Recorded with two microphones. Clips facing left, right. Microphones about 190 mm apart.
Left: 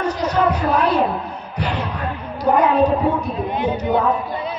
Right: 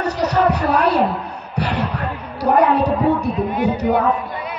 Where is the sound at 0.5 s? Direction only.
70° right (ahead or behind).